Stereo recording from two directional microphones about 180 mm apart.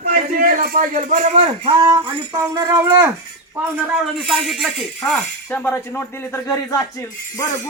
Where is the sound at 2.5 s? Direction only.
15° right (ahead or behind).